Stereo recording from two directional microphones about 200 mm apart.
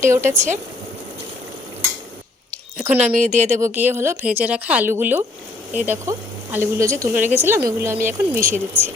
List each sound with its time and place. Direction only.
0.0 s speech: 15° right (ahead or behind)
2.7 s speech: 10° right (ahead or behind)
3.2 s speech: 35° right (ahead or behind)
3.6 s speech: 10° right (ahead or behind)